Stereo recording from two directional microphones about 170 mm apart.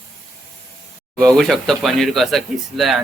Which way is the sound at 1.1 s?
5° left (ahead or behind).